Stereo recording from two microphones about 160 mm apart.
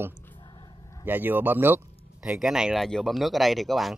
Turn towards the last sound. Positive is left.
turn(degrees=0)  # may be behind; listen again after turning